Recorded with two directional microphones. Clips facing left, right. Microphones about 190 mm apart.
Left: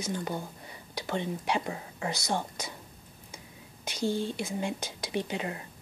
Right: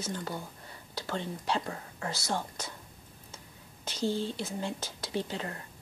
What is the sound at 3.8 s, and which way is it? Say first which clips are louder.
Speech: left 1 dB; 15° left (ahead or behind).